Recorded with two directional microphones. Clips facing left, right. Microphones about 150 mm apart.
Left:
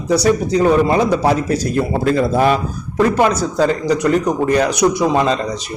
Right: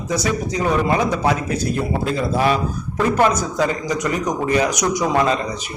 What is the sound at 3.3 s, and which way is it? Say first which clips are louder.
A man's voice: left 4 dB; 35° left (ahead or behind).